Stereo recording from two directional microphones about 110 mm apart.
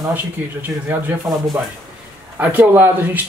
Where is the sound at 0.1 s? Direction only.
15° right (ahead or behind).